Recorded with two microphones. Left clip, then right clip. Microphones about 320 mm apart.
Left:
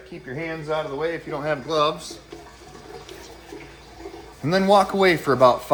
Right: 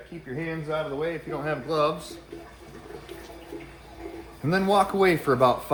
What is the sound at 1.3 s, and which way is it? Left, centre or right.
Speech, left.